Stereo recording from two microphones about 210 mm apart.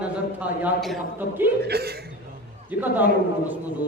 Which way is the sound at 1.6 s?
50° right (ahead or behind).